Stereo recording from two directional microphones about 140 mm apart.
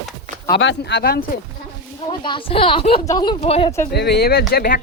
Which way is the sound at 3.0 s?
30° left (ahead or behind).